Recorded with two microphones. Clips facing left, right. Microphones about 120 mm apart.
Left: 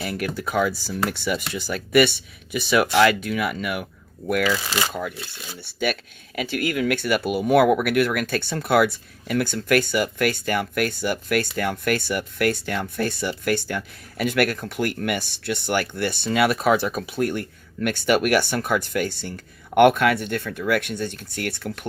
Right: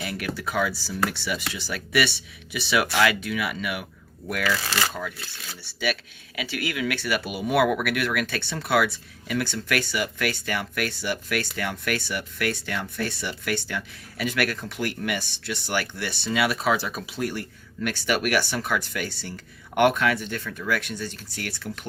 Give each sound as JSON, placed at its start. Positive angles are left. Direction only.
{"t": 0.0, "sound": "speech", "side_deg": 45}
{"t": 5.5, "sound": "speech", "side_deg": 45}